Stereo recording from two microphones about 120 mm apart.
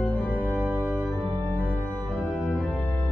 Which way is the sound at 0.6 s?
15° right (ahead or behind).